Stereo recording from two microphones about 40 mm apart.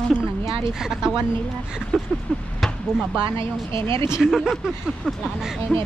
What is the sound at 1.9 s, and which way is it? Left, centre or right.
Speech, centre.